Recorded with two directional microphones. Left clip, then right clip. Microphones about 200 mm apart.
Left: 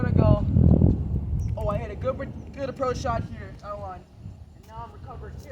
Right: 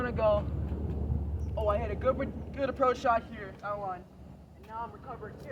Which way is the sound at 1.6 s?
5° left (ahead or behind).